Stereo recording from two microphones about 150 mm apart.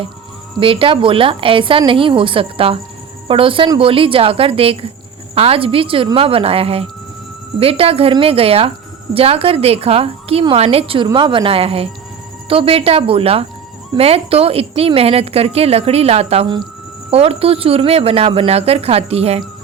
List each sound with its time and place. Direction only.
0.6 s a woman's voice: 35° right (ahead or behind)